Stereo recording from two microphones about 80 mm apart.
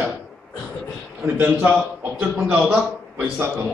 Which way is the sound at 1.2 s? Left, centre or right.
Right.